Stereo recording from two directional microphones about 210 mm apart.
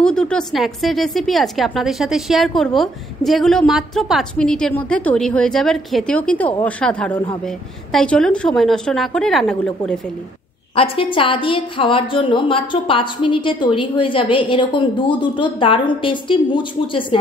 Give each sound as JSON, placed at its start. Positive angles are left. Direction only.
{"t": 0.0, "sound": "a woman's voice", "side_deg": 5}
{"t": 10.8, "sound": "a woman's voice", "side_deg": 25}